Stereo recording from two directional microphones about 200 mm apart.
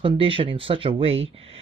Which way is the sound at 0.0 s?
25° right (ahead or behind).